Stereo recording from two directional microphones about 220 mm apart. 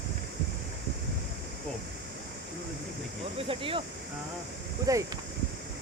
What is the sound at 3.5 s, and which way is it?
Speech, 25° right (ahead or behind).